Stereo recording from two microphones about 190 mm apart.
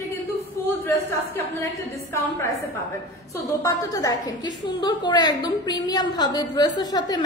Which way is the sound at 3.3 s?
15° left (ahead or behind).